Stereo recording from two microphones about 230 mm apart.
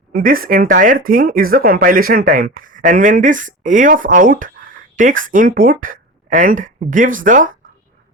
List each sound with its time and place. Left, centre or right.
0.1 s speech: right